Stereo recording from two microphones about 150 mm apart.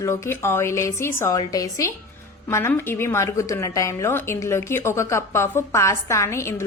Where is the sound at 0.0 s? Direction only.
20° left (ahead or behind).